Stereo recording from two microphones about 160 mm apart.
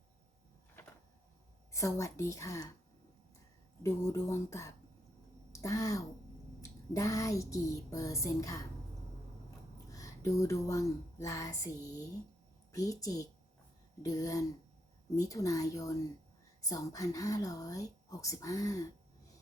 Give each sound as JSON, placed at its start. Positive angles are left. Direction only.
{"t": 0.8, "sound": "a sound", "side_deg": 15}
{"t": 1.7, "sound": "a woman's voice", "side_deg": 20}
{"t": 3.8, "sound": "a woman's voice", "side_deg": 20}
{"t": 9.9, "sound": "a woman's voice", "side_deg": 20}